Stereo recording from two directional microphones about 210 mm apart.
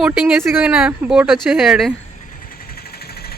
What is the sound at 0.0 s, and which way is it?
Speech, 5° right (ahead or behind).